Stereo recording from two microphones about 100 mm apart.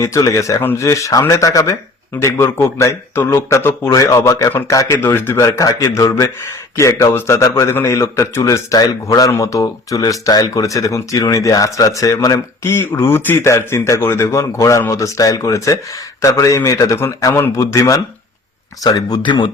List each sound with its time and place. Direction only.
0.0 s speech: 30° left (ahead or behind)
0.6 s a man's voice: 20° left (ahead or behind)
0.9 s a man's voice: 30° left (ahead or behind)
19.2 s speech: 50° left (ahead or behind)